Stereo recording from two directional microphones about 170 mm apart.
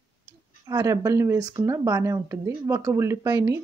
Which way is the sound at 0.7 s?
20° right (ahead or behind).